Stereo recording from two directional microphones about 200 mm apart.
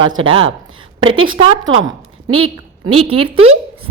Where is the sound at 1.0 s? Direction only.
90° right.